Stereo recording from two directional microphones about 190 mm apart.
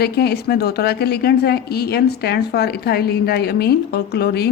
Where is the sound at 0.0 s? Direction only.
55° left (ahead or behind).